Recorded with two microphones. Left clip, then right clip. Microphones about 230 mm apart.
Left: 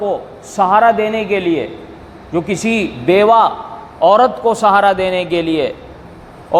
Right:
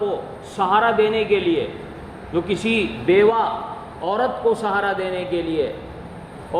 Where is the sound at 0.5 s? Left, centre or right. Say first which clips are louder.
Left 7 dB; left.